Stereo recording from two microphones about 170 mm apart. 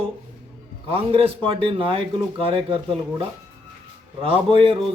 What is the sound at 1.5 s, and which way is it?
Speech, 30° right (ahead or behind).